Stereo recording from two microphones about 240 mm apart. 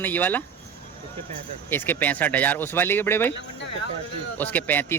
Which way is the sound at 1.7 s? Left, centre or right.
Centre.